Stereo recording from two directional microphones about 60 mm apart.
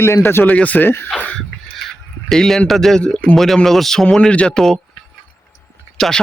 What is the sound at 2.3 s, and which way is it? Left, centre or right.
Speech, centre.